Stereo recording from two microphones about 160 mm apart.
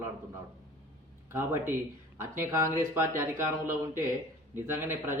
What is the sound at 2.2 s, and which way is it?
Speech, 15° right (ahead or behind).